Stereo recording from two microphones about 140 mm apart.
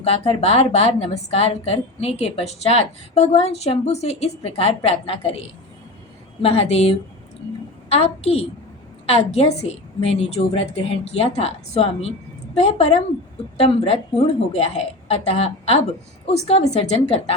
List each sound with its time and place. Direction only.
0.0 s a woman's voice: 45° left (ahead or behind)